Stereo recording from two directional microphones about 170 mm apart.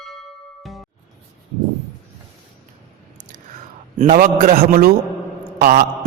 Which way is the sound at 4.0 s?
55° right (ahead or behind).